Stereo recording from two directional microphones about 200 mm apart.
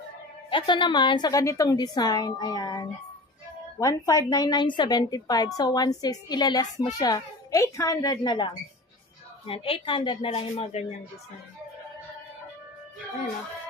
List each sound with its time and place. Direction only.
0.5 s a child's voice: 25° left (ahead or behind)
9.5 s a child's voice: 25° left (ahead or behind)